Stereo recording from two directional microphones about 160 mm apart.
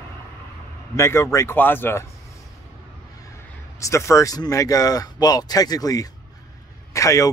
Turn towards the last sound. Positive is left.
turn(degrees=20)  # may be behind; listen again after turning